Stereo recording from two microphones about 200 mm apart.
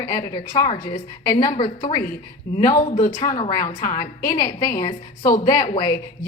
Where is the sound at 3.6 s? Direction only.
40° left (ahead or behind).